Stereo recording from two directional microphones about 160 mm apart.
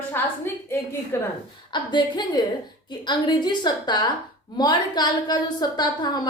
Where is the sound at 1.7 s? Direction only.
30° left (ahead or behind).